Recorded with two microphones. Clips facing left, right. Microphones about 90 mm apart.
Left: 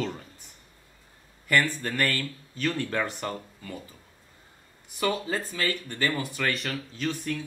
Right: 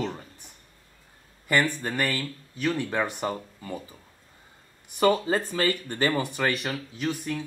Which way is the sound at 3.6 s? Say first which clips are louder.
Right 4 dB; 25° right (ahead or behind).